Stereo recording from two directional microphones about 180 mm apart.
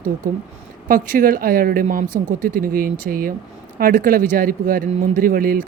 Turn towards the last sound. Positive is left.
turn(degrees=-50)  # may be behind; listen again after turning